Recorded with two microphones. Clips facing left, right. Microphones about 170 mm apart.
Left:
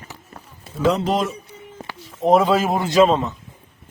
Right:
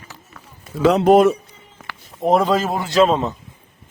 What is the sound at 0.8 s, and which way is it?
Speech, 65° right (ahead or behind).